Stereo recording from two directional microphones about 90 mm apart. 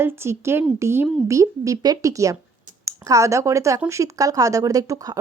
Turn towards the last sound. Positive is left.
turn(degrees=-40)  # may be behind; listen again after turning